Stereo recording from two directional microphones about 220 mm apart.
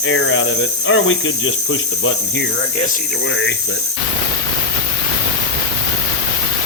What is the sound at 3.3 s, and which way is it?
Speech, 55° left (ahead or behind).